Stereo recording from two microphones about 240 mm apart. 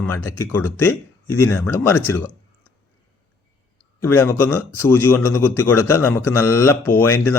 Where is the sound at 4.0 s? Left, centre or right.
Centre.